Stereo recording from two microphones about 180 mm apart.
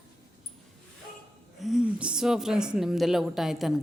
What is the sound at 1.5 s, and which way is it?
Speech, centre (ahead or behind).